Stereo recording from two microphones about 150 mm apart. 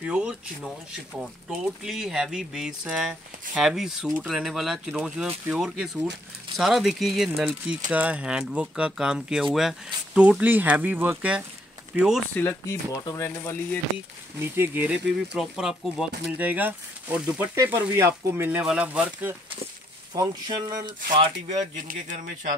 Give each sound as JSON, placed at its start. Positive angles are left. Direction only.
{"t": 0.0, "sound": "speech", "side_deg": -5}
{"t": 12.4, "sound": "speech", "side_deg": 15}
{"t": 14.4, "sound": "speech", "side_deg": -15}
{"t": 20.2, "sound": "speech", "side_deg": -25}
{"t": 21.5, "sound": "speech", "side_deg": -50}